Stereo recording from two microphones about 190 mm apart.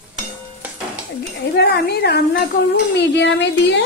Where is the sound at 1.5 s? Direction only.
55° left (ahead or behind).